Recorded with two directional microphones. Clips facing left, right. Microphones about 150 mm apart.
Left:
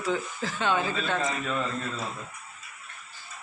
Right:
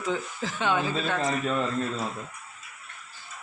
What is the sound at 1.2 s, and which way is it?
Speech, 35° right (ahead or behind).